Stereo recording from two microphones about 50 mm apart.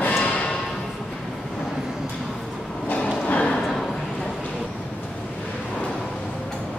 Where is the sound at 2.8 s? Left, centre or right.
Left.